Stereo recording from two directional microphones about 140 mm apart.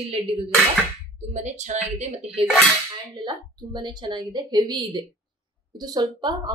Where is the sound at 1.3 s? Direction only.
55° right (ahead or behind).